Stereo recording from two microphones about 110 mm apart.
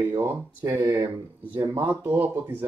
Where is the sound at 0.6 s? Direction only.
30° right (ahead or behind).